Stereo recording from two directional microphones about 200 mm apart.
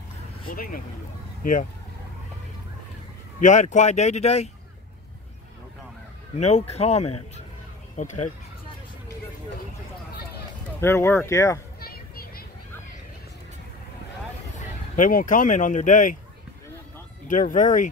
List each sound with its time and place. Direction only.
0.5 s speech: 45° left (ahead or behind)
3.3 s speech: 40° left (ahead or behind)
6.3 s speech: 35° left (ahead or behind)
10.8 s speech: 15° left (ahead or behind)
11.8 s children playing: 50° left (ahead or behind)
15.0 s speech: 40° left (ahead or behind)
17.3 s speech: 40° left (ahead or behind)